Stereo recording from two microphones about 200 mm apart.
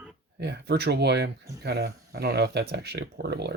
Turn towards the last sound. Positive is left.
turn(degrees=-55)  # may be behind; listen again after turning